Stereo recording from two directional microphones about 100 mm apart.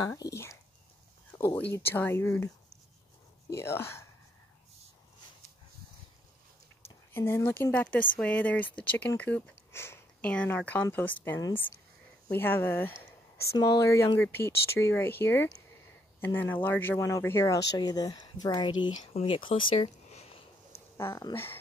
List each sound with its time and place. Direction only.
0.0 s speech: 35° left (ahead or behind)
1.6 s speech: 20° left (ahead or behind)
3.5 s speech: 25° left (ahead or behind)
7.2 s speech: 25° left (ahead or behind)
10.2 s speech: 15° left (ahead or behind); by 18.9 s 45° left (ahead or behind)
19.1 s a sound: 65° left (ahead or behind); by 20.8 s 90° left